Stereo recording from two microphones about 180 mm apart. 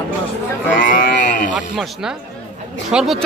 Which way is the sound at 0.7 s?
50° left (ahead or behind).